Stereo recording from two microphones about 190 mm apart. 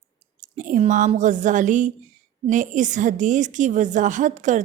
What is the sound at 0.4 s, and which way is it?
A woman's voice, 40° right (ahead or behind).